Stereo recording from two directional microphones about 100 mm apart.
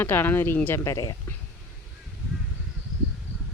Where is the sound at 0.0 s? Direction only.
20° left (ahead or behind).